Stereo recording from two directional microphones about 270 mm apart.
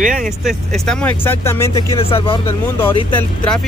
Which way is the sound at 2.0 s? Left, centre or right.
Centre.